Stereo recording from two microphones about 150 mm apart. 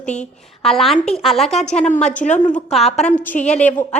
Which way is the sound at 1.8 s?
50° left (ahead or behind).